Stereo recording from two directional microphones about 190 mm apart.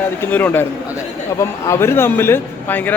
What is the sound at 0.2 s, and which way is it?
Speech, 10° left (ahead or behind).